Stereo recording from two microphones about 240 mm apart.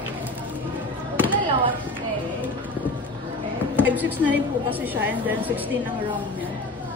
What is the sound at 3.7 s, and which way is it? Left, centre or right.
Mantra, centre.